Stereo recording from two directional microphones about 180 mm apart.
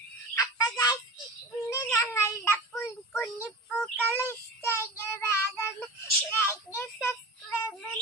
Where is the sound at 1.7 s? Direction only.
15° left (ahead or behind).